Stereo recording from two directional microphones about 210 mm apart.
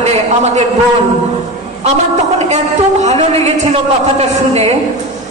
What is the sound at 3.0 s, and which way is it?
A man's voice, 30° right (ahead or behind).